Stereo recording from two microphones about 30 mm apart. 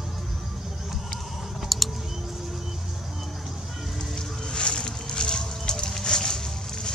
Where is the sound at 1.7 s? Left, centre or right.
Centre.